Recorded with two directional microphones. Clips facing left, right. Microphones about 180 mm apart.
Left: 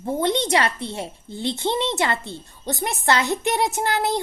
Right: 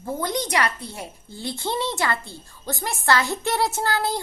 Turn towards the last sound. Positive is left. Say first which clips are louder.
# left 2 dB
turn(degrees=20)  # may be behind; listen again after turning